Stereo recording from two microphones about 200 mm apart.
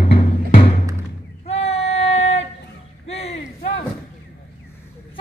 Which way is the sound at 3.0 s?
30° left (ahead or behind).